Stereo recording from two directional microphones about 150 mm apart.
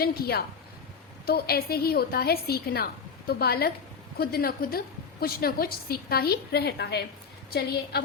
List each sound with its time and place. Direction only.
0.0 s a woman's voice: 90° left